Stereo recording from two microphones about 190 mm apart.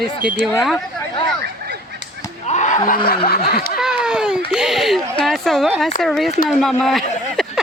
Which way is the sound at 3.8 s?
5° right (ahead or behind).